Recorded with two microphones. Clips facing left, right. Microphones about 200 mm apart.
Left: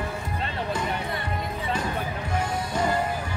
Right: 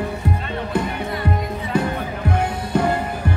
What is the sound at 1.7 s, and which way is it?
Music, 60° right (ahead or behind).